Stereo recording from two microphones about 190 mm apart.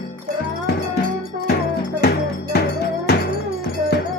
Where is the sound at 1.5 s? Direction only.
60° left (ahead or behind).